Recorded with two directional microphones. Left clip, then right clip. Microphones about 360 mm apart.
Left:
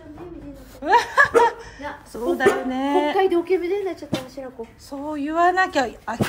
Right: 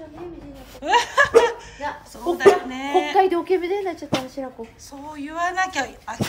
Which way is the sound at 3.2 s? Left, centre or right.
Right.